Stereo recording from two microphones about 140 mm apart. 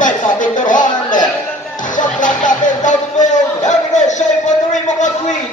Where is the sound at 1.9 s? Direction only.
65° left (ahead or behind).